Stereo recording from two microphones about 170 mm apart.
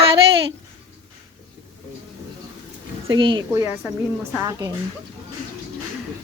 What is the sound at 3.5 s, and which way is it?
Speech, 15° right (ahead or behind).